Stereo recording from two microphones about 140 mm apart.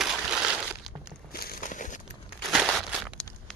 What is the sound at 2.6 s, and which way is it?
Crumpling, centre (ahead or behind).